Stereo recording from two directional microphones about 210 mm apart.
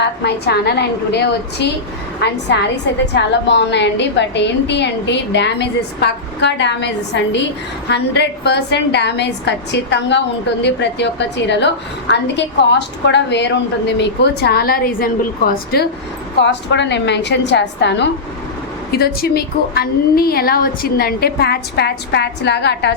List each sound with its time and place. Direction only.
0.3 s a woman's voice: 50° left (ahead or behind)
13.1 s a woman's voice: 55° left (ahead or behind)
16.4 s a woman's voice: 55° left (ahead or behind)